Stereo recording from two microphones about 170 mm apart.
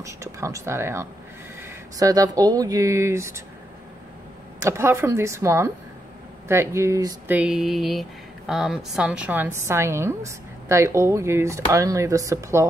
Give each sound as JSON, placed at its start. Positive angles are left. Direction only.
{"t": 0.0, "sound": "a woman's voice", "side_deg": -15}
{"t": 4.6, "sound": "a woman's voice", "side_deg": -15}
{"t": 7.2, "sound": "a woman's voice", "side_deg": -5}